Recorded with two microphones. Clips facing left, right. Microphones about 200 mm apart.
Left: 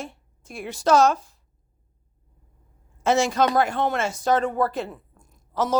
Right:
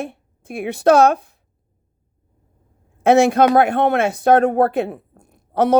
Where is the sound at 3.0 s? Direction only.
60° right (ahead or behind).